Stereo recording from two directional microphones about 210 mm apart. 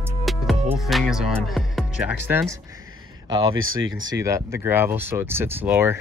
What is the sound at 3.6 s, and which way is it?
Speech, 75° right (ahead or behind).